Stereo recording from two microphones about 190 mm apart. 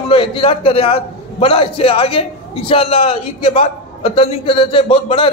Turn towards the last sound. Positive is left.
turn(degrees=30)  # may be behind; listen again after turning